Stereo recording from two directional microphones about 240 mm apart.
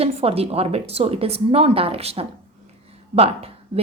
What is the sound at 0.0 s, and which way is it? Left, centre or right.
Speech, right.